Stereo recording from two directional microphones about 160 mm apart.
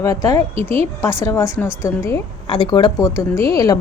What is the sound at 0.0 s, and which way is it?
A woman's voice, 20° left (ahead or behind).